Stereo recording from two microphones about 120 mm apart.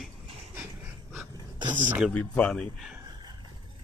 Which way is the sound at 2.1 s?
10° left (ahead or behind).